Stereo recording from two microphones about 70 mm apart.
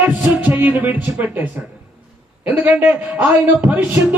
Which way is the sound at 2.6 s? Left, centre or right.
Right.